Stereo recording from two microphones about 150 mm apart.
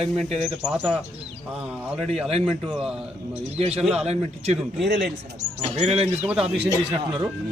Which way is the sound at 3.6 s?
45° right (ahead or behind).